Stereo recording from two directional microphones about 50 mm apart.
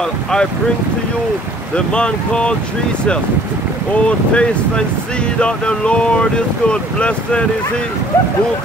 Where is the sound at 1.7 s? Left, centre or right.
Centre.